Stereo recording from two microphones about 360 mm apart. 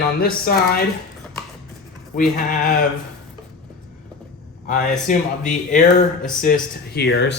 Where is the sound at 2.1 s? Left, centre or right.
Left.